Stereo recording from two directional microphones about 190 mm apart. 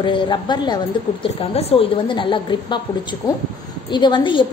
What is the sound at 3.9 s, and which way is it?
Speech, 25° left (ahead or behind).